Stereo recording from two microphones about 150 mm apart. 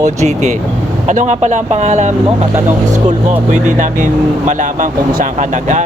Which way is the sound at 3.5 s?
55° right (ahead or behind).